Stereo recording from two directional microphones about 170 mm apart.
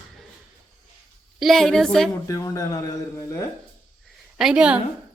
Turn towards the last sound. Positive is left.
turn(degrees=-5)  # may be behind; listen again after turning